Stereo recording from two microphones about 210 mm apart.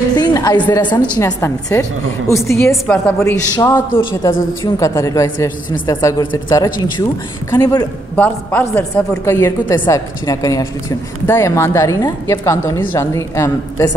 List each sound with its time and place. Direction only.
0.1 s a woman's voice: 20° left (ahead or behind)
8.2 s a woman's voice: 5° left (ahead or behind)